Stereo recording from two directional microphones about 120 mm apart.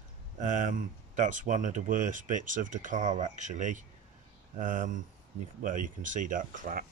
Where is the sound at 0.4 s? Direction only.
90° right.